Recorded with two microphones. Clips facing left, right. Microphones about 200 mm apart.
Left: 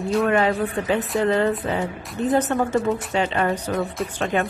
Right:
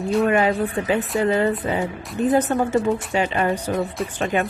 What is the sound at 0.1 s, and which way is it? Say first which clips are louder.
Speech: right 1 dB; centre (ahead or behind).